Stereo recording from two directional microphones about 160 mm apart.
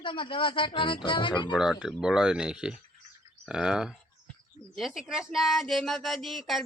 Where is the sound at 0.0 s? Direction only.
30° left (ahead or behind).